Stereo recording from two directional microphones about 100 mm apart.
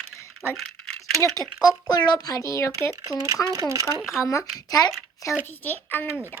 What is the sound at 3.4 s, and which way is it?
Speech, 40° right (ahead or behind).